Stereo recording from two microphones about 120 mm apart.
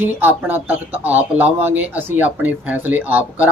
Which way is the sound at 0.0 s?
15° right (ahead or behind).